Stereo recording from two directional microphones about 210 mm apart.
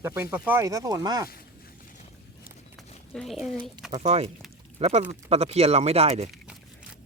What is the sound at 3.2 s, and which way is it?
Speech, centre (ahead or behind).